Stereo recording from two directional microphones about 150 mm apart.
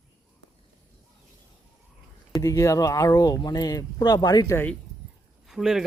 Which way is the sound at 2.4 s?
20° left (ahead or behind).